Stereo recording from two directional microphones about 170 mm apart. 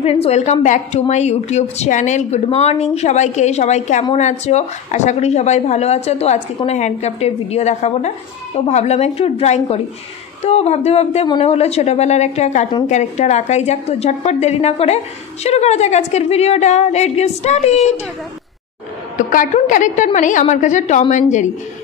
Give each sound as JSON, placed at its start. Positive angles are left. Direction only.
{"t": 0.0, "sound": "a woman's voice", "side_deg": 35}
{"t": 19.1, "sound": "a woman's voice", "side_deg": 50}